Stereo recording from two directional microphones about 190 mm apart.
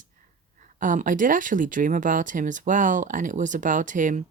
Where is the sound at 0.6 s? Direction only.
45° right (ahead or behind).